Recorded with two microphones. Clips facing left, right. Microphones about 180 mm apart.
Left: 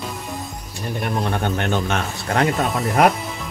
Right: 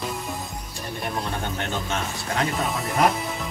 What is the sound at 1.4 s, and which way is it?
Speech, 65° left (ahead or behind).